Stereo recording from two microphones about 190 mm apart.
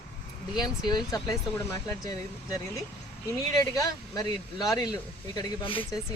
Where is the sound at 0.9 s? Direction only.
20° left (ahead or behind).